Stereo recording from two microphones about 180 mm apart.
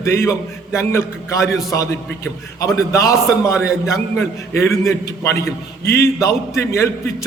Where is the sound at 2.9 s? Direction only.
15° left (ahead or behind).